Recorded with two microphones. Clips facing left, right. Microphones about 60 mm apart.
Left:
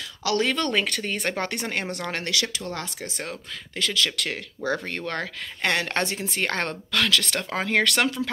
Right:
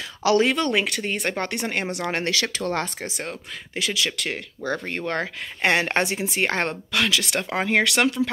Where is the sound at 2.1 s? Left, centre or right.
Right.